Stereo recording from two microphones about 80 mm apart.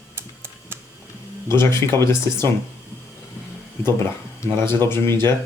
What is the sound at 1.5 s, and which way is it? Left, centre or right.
Speech, left.